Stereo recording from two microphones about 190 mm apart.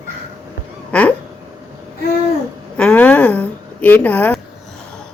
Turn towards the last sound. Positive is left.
turn(degrees=10)  # may be behind; listen again after turning